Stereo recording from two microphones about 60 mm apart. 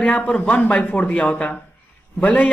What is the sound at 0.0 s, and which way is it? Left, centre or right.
Speech, left.